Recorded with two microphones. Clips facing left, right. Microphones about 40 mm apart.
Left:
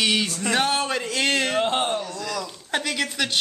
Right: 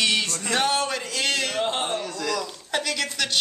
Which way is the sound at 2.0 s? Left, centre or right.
Right.